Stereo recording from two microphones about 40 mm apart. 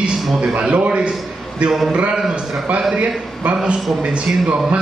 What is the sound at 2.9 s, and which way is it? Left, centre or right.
A man's voice, right.